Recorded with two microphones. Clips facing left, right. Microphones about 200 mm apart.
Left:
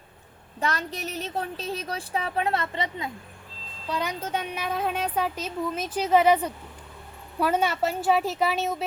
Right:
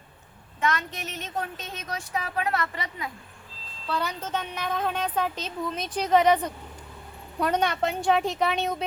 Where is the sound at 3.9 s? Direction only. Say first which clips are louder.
Left 1 dB; 15° left (ahead or behind).